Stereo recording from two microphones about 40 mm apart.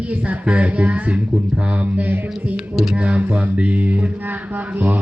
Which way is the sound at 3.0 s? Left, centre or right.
Right.